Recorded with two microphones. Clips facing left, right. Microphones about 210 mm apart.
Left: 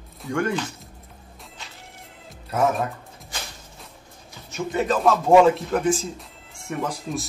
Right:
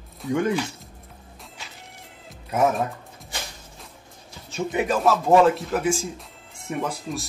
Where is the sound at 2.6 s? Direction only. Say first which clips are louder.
Even; centre (ahead or behind).